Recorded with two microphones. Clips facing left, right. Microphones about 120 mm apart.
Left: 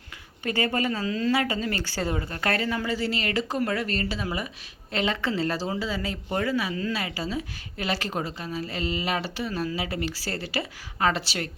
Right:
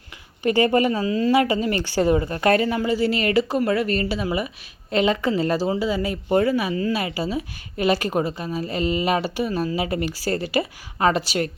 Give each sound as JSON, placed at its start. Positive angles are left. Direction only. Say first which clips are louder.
{"t": 0.4, "sound": "a woman's voice", "louder": "right 8 dB", "side_deg": -20}